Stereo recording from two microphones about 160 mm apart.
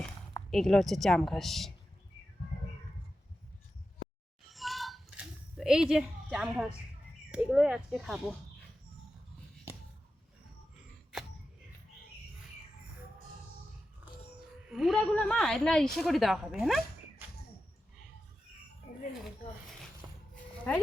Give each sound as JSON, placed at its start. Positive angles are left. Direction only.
{"t": 0.5, "sound": "speech", "side_deg": 5}
{"t": 4.4, "sound": "a sound", "side_deg": 0}
{"t": 7.3, "sound": "speech", "side_deg": -5}
{"t": 9.7, "sound": "a sound", "side_deg": -15}
{"t": 14.7, "sound": "speech", "side_deg": 0}
{"t": 20.3, "sound": "music", "side_deg": 10}